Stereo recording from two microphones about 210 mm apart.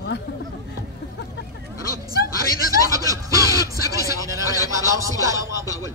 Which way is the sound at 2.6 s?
15° right (ahead or behind).